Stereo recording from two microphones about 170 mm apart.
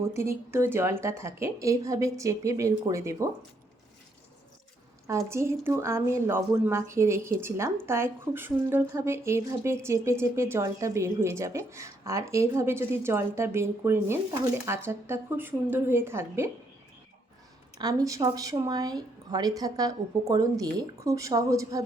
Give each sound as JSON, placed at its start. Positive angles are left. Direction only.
{"t": 0.0, "sound": "a woman's voice", "side_deg": -15}
{"t": 5.0, "sound": "a woman's voice", "side_deg": -15}
{"t": 17.7, "sound": "speech", "side_deg": -20}